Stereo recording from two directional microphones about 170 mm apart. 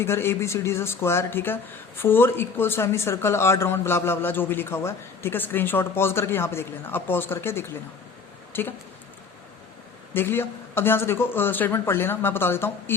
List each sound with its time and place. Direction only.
0.0 s speech: 15° left (ahead or behind)
10.2 s speech: 15° left (ahead or behind)